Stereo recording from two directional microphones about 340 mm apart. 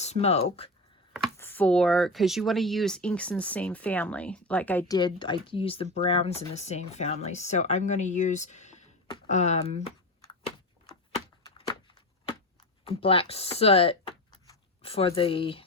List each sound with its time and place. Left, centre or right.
0.0 s speech: centre
1.1 s speech: centre
11.4 s a sound: centre
12.8 s speech: centre